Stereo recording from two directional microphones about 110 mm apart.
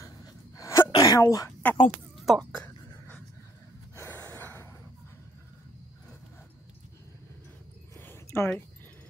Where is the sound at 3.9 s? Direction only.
20° left (ahead or behind).